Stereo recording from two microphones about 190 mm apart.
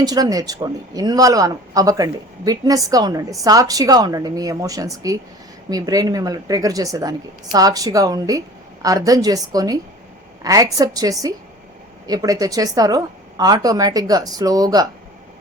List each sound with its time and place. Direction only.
0.0 s speech: 20° right (ahead or behind)